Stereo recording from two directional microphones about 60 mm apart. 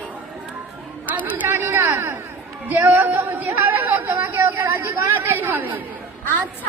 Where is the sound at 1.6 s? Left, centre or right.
Right.